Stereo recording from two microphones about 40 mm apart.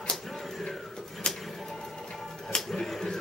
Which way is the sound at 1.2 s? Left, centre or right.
Centre.